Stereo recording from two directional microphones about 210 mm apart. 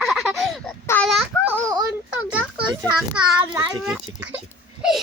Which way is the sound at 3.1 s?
5° right (ahead or behind).